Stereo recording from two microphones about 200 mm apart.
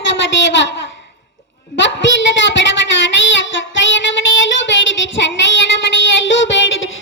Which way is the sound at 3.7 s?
65° left (ahead or behind).